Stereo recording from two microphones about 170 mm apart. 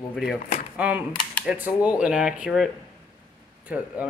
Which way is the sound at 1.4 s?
10° right (ahead or behind).